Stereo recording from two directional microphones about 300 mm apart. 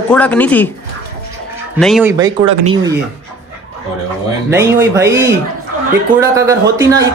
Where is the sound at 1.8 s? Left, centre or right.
Centre.